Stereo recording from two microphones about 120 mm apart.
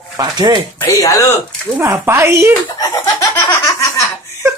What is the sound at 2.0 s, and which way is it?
Speech, 20° right (ahead or behind).